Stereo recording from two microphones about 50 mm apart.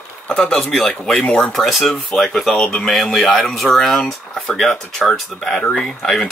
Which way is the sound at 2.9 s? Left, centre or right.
Centre.